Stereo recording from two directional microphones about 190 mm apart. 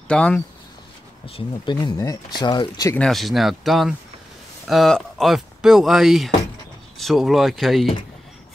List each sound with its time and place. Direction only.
0.1 s speech: 5° left (ahead or behind)
1.2 s speech: 25° left (ahead or behind)
3.0 s speech: centre (ahead or behind)